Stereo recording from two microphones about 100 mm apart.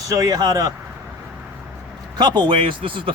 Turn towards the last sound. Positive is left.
turn(degrees=-60)  # may be behind; listen again after turning